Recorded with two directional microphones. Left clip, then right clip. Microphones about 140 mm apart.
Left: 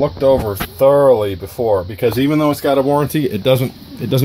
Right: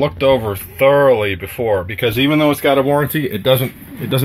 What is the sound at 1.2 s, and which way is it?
Speech, 10° left (ahead or behind).